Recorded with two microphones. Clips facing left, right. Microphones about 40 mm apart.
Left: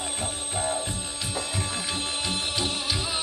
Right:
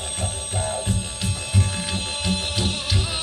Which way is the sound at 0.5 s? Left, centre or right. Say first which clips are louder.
Right 2 dB; centre.